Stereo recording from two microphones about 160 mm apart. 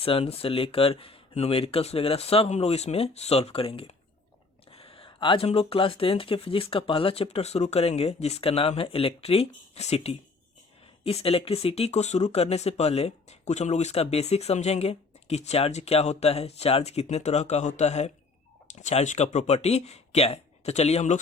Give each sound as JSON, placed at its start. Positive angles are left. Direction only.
{"t": 0.0, "sound": "speech", "side_deg": 35}
{"t": 4.7, "sound": "a sound", "side_deg": 35}
{"t": 5.5, "sound": "speech", "side_deg": 35}